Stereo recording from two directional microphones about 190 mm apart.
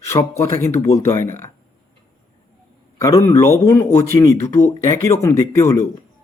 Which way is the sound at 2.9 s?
15° left (ahead or behind).